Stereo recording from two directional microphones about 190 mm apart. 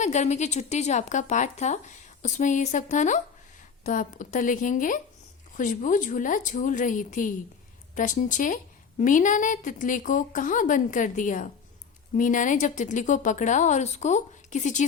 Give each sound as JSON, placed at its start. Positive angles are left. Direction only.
{"t": 0.0, "sound": "a woman's voice", "side_deg": 40}